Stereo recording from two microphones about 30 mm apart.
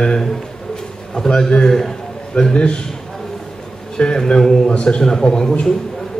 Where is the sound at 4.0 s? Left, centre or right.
Left.